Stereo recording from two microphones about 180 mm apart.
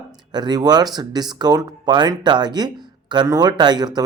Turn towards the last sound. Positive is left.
turn(degrees=-25)  # may be behind; listen again after turning